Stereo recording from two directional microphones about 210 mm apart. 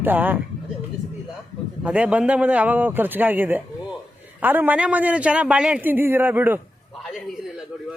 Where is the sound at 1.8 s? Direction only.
5° right (ahead or behind).